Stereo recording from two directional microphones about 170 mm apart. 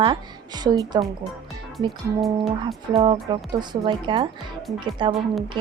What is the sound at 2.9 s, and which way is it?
A woman's voice, 30° right (ahead or behind).